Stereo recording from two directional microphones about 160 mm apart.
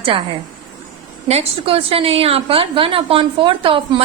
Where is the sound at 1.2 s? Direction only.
40° right (ahead or behind).